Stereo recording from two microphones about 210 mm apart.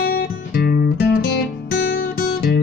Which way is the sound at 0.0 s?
45° left (ahead or behind).